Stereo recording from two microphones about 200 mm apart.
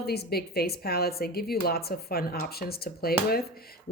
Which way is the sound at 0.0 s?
50° left (ahead or behind).